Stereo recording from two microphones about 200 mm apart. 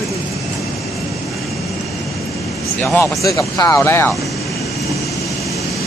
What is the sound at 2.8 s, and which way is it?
Speech, 10° left (ahead or behind).